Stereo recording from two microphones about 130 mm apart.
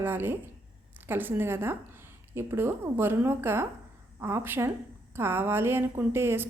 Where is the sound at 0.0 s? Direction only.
15° right (ahead or behind).